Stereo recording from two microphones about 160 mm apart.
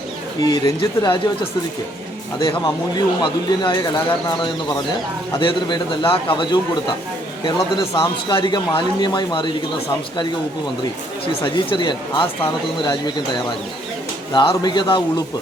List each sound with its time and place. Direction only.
0.4 s speech: 25° left (ahead or behind)
2.4 s speech: 30° left (ahead or behind)
5.4 s a man's voice: 30° left (ahead or behind)
7.6 s a man's voice: 15° left (ahead or behind)
8.3 s speech: 30° left (ahead or behind)
11.4 s a man's voice: 30° left (ahead or behind)
14.3 s speech: 30° left (ahead or behind)